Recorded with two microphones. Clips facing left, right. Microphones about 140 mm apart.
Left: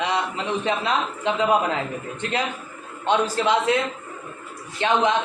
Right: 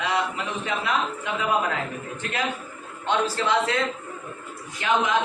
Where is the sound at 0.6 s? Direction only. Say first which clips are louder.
Left 1 dB; 25° left (ahead or behind).